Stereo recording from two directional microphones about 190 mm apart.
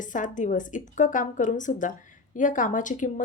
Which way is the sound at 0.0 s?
45° left (ahead or behind).